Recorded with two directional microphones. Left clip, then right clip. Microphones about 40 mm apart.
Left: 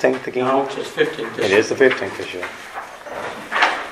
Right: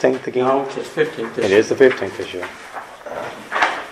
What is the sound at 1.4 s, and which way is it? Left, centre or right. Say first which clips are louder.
Speech: right 2 dB; right.